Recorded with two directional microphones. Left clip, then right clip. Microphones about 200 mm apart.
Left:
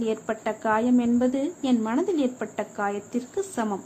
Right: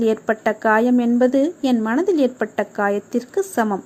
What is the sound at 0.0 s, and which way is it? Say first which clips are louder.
A woman's voice: right 9 dB; 30° right (ahead or behind).